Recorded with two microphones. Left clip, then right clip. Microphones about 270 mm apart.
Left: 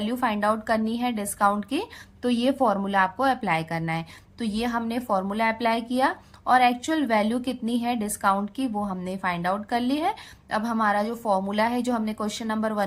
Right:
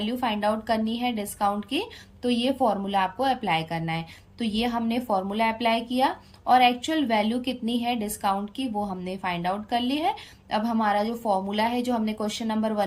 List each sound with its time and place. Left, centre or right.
0.0 s a woman's voice: centre
8.7 s speech: left
9.0 s a woman's voice: centre